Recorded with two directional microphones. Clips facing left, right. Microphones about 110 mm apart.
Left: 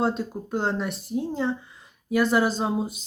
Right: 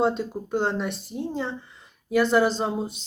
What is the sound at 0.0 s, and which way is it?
Speech, centre (ahead or behind).